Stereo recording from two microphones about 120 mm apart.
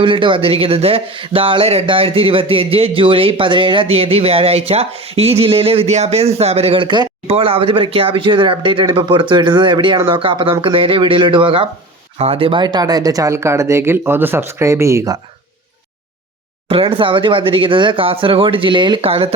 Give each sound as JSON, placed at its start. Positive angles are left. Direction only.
{"t": 0.0, "sound": "speech", "side_deg": -45}
{"t": 16.6, "sound": "speech", "side_deg": -50}